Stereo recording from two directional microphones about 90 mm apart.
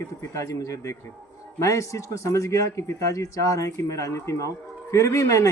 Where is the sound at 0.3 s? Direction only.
35° left (ahead or behind).